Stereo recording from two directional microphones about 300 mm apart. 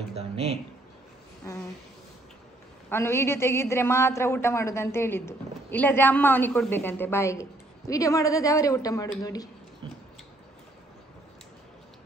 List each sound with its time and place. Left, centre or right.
0.1 s speech: centre
2.9 s a man's voice: centre